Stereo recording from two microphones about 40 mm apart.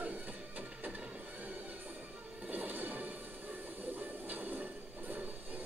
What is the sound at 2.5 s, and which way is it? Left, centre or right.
Smash, right.